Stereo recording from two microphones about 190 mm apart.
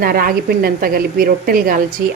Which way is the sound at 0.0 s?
50° right (ahead or behind).